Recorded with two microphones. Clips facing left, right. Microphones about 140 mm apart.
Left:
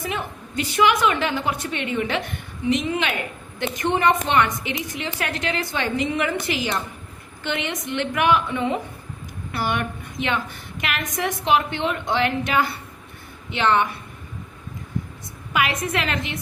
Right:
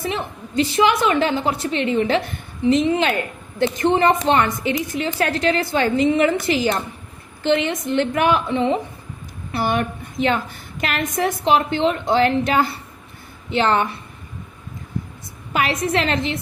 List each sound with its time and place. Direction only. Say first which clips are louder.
0.0 s a woman's voice: right 3 dB; 30° right (ahead or behind)
15.5 s a woman's voice: right 3 dB; 35° right (ahead or behind)